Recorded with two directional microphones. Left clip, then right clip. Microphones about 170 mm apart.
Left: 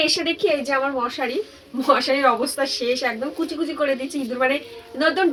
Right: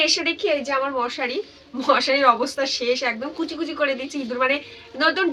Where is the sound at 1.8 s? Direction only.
15° right (ahead or behind).